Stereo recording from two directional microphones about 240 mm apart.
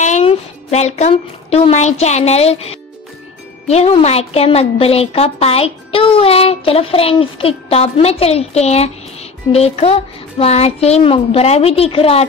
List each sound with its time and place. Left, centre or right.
0.0 s a woman's voice: left